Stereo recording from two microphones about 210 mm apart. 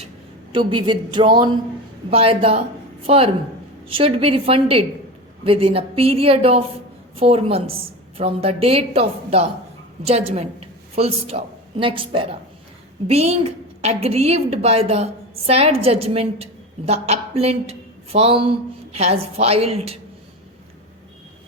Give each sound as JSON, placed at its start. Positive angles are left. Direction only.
{"t": 0.5, "sound": "a woman's voice", "side_deg": -25}